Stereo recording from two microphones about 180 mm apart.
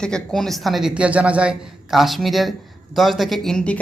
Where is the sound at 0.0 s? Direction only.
5° left (ahead or behind).